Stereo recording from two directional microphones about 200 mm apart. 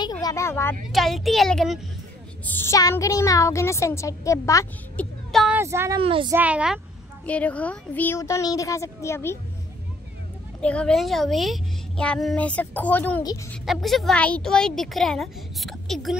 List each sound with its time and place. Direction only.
0.0 s speech: 20° left (ahead or behind)
0.9 s speech: centre (ahead or behind)
2.4 s a woman's voice: 10° left (ahead or behind)
5.3 s child singing: centre (ahead or behind)
5.6 s speech: 15° right (ahead or behind)
5.9 s a woman's voice: 25° right (ahead or behind)
6.3 s speech: 5° right (ahead or behind)
7.2 s a woman's voice: 5° left (ahead or behind)
10.6 s speech: 5° left (ahead or behind)